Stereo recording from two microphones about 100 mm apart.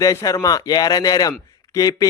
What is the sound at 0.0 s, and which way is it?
A man's voice, 35° left (ahead or behind).